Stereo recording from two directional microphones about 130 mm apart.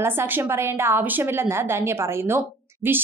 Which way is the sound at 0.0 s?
15° right (ahead or behind).